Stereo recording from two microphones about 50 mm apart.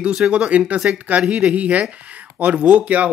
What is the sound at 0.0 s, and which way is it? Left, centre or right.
Speech, right.